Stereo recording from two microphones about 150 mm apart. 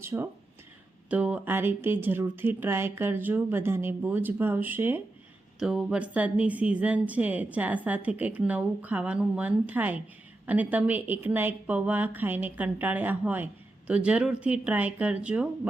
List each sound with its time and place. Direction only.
0.0 s speech: 15° right (ahead or behind)